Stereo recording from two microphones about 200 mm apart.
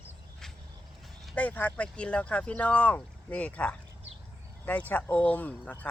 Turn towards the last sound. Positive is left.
turn(degrees=5)  # may be behind; listen again after turning